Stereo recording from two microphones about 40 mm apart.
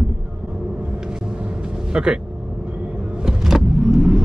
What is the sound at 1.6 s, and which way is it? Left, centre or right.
Vehicle, centre.